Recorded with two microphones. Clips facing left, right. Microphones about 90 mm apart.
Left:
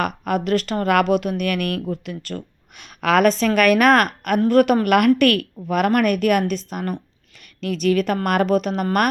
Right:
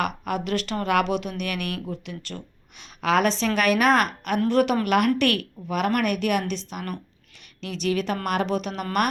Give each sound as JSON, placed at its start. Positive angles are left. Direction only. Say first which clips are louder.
{"t": 0.0, "sound": "speech", "louder": "left 4 dB", "side_deg": 45}